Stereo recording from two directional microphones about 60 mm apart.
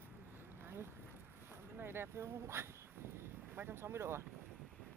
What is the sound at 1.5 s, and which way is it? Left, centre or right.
Speech, right.